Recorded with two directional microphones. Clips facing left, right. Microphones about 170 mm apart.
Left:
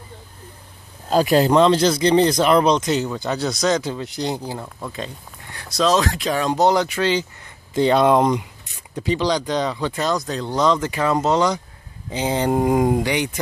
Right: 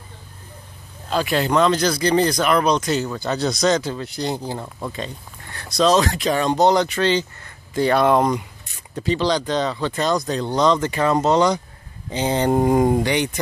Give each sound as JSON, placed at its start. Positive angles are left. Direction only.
{"t": 1.1, "sound": "speech", "side_deg": 40}
{"t": 4.6, "sound": "speech", "side_deg": -10}
{"t": 5.5, "sound": "speech", "side_deg": 10}
{"t": 7.7, "sound": "speech", "side_deg": 20}